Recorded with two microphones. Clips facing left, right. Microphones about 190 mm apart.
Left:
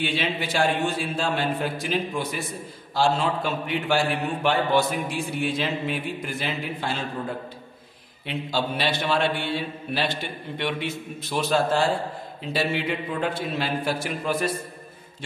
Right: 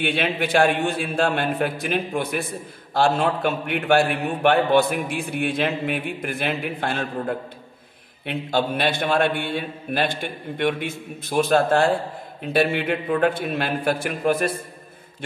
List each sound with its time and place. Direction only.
0.0 s a man's voice: 55° right (ahead or behind)